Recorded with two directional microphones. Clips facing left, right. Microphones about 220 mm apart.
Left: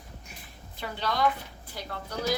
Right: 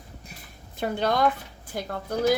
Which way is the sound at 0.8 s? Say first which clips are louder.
Right 5 dB; 50° right (ahead or behind).